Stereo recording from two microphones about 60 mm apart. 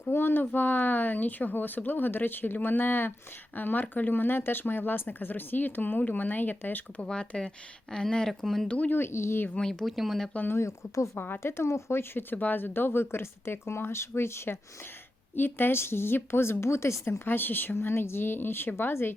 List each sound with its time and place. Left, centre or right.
0.1 s speech: left
7.0 s speech: centre
8.6 s speech: left
9.0 s speech: left
9.6 s speech: centre
9.8 s speech: centre
10.3 s speech: left
10.6 s speech: left
11.2 s speech: left
15.4 s speech: left